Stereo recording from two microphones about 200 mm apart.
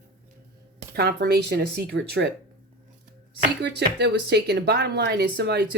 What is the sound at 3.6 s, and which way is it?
Speech, 55° right (ahead or behind).